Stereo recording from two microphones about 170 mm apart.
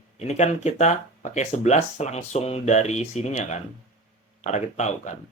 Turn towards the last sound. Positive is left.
turn(degrees=45)  # may be behind; listen again after turning